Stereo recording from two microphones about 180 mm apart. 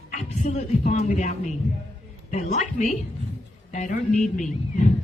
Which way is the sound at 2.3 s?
40° left (ahead or behind).